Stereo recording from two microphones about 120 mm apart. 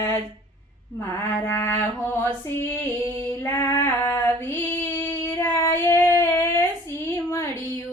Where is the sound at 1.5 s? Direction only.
20° left (ahead or behind).